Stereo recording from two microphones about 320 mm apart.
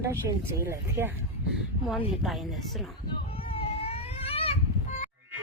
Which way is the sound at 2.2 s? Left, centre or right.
Centre.